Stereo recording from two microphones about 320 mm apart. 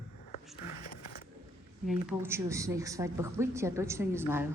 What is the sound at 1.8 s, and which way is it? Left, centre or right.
Speech, centre.